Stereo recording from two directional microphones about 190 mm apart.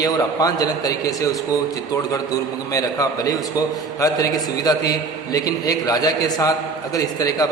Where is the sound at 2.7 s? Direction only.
20° left (ahead or behind).